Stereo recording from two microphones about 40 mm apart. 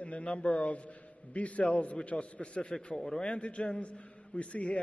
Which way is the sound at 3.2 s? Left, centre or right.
Left.